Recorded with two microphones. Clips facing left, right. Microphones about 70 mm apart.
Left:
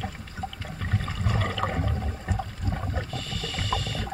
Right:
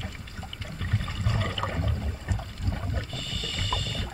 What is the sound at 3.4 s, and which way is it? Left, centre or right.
Water, centre.